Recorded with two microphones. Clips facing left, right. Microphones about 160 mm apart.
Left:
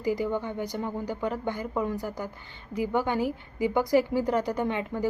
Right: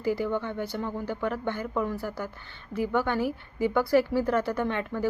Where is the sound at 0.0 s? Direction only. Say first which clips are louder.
Even; 15° left (ahead or behind).